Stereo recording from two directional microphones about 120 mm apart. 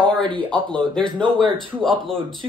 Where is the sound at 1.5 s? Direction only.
45° right (ahead or behind).